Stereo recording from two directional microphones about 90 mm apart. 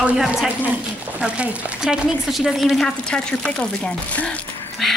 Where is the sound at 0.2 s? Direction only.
5° right (ahead or behind); by 4.4 s 15° left (ahead or behind).